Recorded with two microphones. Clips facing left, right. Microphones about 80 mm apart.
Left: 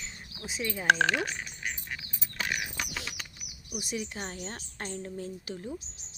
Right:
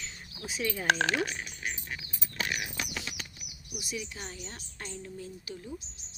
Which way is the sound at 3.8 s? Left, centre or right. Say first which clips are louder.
Left 3 dB; left.